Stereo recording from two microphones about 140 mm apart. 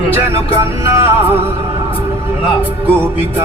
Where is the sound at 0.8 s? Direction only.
20° right (ahead or behind).